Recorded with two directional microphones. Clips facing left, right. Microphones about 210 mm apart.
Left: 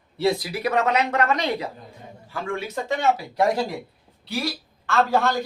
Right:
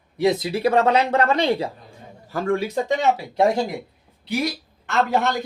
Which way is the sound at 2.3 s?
40° right (ahead or behind).